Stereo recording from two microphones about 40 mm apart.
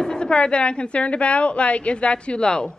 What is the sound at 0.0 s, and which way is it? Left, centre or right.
A woman's voice, left.